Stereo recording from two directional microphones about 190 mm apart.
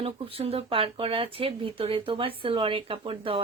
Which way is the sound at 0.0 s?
30° right (ahead or behind).